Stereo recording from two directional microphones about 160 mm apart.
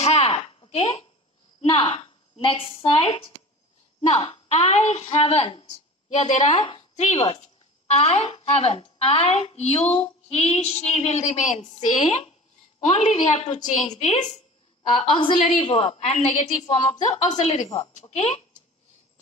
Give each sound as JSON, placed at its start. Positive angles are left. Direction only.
{"t": 0.0, "sound": "a sound", "side_deg": 40}
{"t": 1.6, "sound": "a woman's voice", "side_deg": 35}
{"t": 14.8, "sound": "a woman's voice", "side_deg": 30}